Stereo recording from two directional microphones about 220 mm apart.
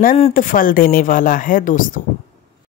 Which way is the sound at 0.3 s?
40° left (ahead or behind).